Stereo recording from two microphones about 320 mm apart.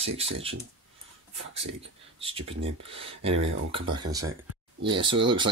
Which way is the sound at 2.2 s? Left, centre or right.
Centre.